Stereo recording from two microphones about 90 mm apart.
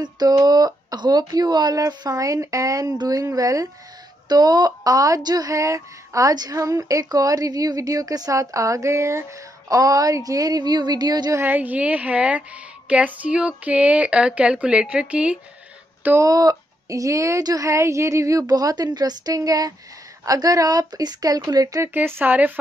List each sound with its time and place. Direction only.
0.0 s speech: 50° right (ahead or behind)
11.3 s a woman's voice: 20° right (ahead or behind)
16.2 s speech: 45° right (ahead or behind)
21.8 s speech: 25° right (ahead or behind)